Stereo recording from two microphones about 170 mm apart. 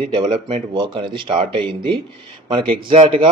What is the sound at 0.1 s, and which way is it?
Speech, 25° right (ahead or behind).